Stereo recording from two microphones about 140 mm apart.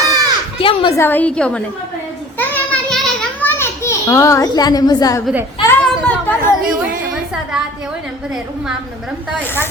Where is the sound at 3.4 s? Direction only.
15° left (ahead or behind).